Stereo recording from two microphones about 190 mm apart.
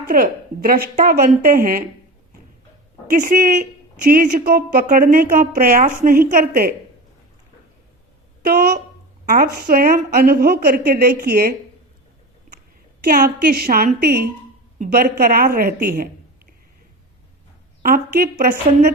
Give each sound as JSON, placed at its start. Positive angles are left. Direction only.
{"t": 0.0, "sound": "a woman's voice", "side_deg": -50}
{"t": 3.1, "sound": "a woman's voice", "side_deg": -45}
{"t": 8.4, "sound": "a woman's voice", "side_deg": -55}
{"t": 12.5, "sound": "a sound", "side_deg": -45}
{"t": 13.1, "sound": "a woman's voice", "side_deg": -50}
{"t": 17.8, "sound": "a woman's voice", "side_deg": -50}